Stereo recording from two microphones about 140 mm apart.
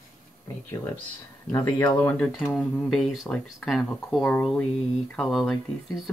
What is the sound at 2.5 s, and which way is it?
Speech, centre (ahead or behind).